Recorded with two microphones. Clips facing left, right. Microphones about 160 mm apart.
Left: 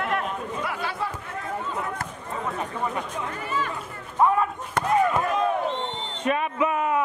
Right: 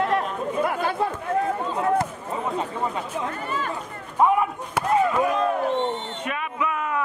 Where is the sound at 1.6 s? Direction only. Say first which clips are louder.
Right 8 dB; 30° right (ahead or behind).